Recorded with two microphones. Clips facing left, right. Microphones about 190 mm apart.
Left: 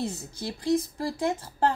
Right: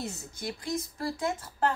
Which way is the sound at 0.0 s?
30° left (ahead or behind).